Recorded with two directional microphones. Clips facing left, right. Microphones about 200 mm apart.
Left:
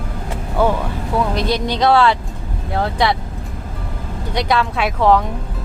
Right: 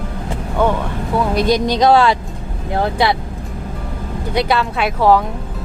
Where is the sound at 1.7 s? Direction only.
15° right (ahead or behind).